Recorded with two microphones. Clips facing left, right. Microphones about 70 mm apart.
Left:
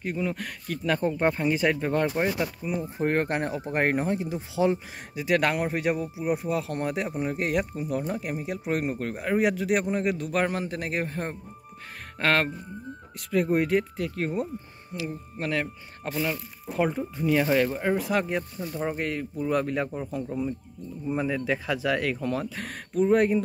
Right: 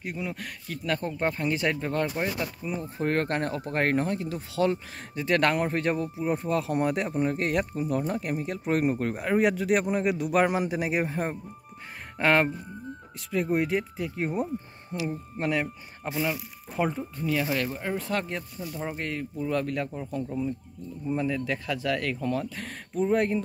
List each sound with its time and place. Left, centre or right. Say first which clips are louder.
0.0 s speech: left 4 dB; centre
5.1 s speech: even; centre
14.9 s speech: right 2 dB; right
15.3 s speech: right 1 dB; right
15.6 s speech: even; centre
17.2 s speech: left 5 dB; left
17.9 s speech: left 4 dB; centre